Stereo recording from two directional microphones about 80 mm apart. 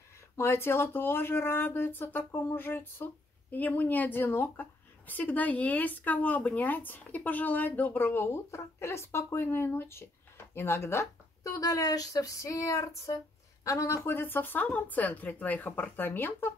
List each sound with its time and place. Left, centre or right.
0.4 s speech: left